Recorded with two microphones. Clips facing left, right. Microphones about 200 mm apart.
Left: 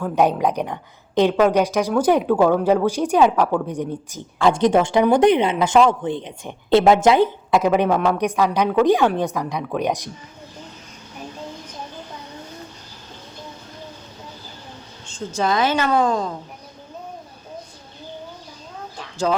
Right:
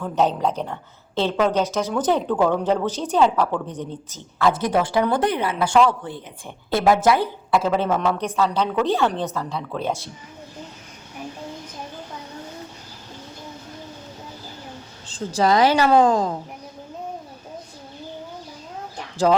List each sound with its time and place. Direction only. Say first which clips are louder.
0.0 s a woman's voice: left 3 dB; 10° left (ahead or behind)
4.4 s a woman's voice: left 4 dB; 25° left (ahead or behind)
15.0 s a woman's voice: right 2 dB; 35° right (ahead or behind)